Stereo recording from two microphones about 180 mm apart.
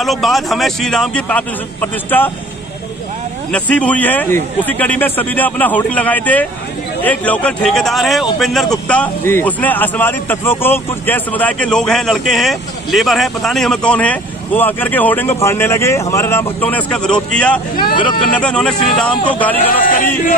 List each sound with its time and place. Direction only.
0.0 s a man's voice: centre (ahead or behind)
3.5 s a man's voice: 5° left (ahead or behind)
19.9 s speech: 50° left (ahead or behind)